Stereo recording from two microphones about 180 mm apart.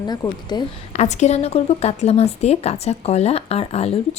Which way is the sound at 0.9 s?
40° left (ahead or behind).